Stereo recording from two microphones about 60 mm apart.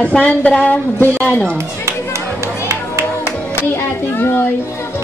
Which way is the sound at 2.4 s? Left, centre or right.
Right.